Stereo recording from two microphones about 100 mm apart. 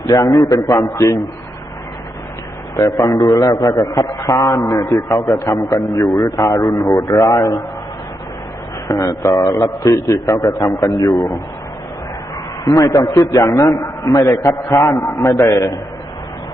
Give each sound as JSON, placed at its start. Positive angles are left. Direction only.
{"t": 0.1, "sound": "a man's voice", "side_deg": 40}
{"t": 2.7, "sound": "a man's voice", "side_deg": 35}
{"t": 3.1, "sound": "a man's voice", "side_deg": 45}
{"t": 4.0, "sound": "a man's voice", "side_deg": 35}
{"t": 8.9, "sound": "a man's voice", "side_deg": 35}
{"t": 9.8, "sound": "a man's voice", "side_deg": 30}
{"t": 10.3, "sound": "a man's voice", "side_deg": 45}
{"t": 12.6, "sound": "a man's voice", "side_deg": 35}